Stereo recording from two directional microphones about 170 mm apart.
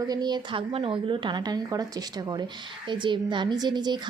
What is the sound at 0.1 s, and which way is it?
A woman's voice, 25° right (ahead or behind).